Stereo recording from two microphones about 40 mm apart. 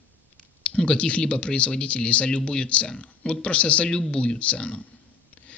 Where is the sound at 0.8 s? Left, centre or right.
Left.